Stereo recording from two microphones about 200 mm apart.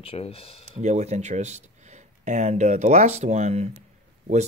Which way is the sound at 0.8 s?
35° right (ahead or behind).